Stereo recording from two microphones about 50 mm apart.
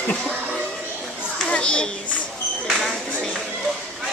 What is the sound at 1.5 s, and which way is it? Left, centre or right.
Speech, centre.